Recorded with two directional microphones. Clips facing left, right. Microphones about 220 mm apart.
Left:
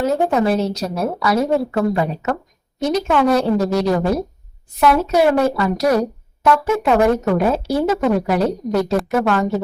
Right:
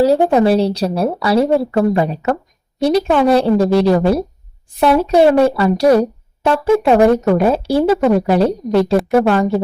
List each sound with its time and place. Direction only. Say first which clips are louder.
0.0 s a woman's voice: right 5 dB; 35° right (ahead or behind)